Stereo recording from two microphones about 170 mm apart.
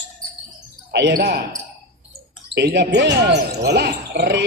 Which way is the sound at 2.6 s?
85° right.